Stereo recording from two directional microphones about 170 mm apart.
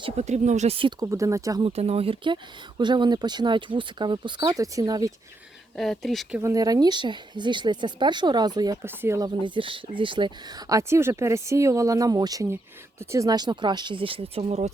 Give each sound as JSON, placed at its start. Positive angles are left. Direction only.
{"t": 0.0, "sound": "speech", "side_deg": -40}
{"t": 1.6, "sound": "speech", "side_deg": -35}
{"t": 5.7, "sound": "speech", "side_deg": 0}
{"t": 6.3, "sound": "speech", "side_deg": -20}
{"t": 9.4, "sound": "speech", "side_deg": -30}